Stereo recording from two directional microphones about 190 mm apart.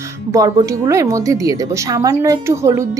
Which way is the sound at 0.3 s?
15° right (ahead or behind).